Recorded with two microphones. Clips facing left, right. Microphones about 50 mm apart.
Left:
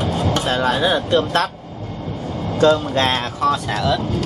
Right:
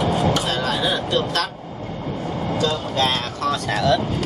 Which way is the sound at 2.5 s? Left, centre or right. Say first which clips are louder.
Left 8 dB; left.